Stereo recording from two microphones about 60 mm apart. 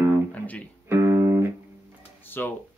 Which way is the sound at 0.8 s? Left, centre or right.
Right.